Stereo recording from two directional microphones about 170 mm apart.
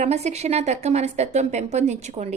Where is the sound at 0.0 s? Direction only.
40° right (ahead or behind).